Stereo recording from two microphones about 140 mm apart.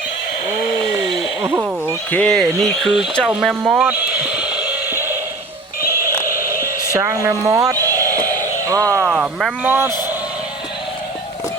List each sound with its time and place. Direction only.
1.4 s speech: 15° right (ahead or behind)
2.0 s speech: 10° left (ahead or behind); by 3.9 s 10° right (ahead or behind)
4.3 s a sound: 5° right (ahead or behind)
7.1 s speech: 25° right (ahead or behind)
8.1 s a sound: 15° left (ahead or behind)
8.6 s speech: 25° right (ahead or behind)
9.0 s speech: 5° right (ahead or behind)